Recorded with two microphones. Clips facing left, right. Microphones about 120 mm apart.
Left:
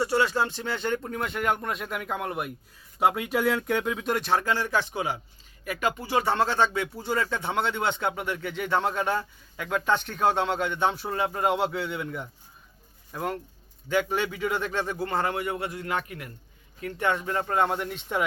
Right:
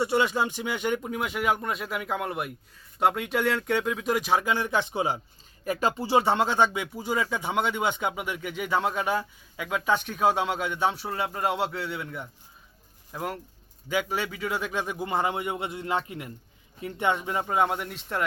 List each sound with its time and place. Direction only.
0.0 s speech: 20° right (ahead or behind); by 18.2 s centre (ahead or behind)